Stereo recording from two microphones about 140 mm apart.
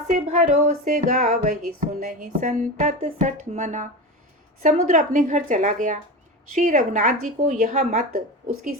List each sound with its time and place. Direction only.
0.1 s music: 60° right (ahead or behind)
6.5 s a woman's voice: 65° right (ahead or behind)